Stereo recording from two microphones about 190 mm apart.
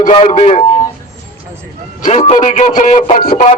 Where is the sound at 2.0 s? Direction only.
35° left (ahead or behind).